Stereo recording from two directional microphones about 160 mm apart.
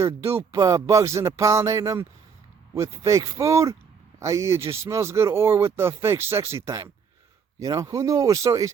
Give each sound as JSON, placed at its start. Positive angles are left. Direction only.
{"t": 0.5, "sound": "speech", "side_deg": -20}